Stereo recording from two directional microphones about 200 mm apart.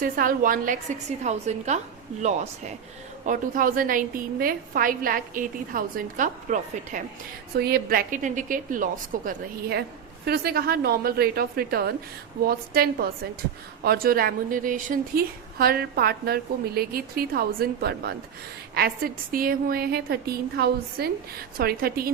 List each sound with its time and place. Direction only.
0.0 s a woman's voice: 45° right (ahead or behind)
3.2 s a woman's voice: 45° right (ahead or behind)
7.5 s a woman's voice: 50° right (ahead or behind)